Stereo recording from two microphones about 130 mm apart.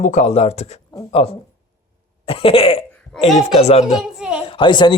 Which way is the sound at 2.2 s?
45° left (ahead or behind).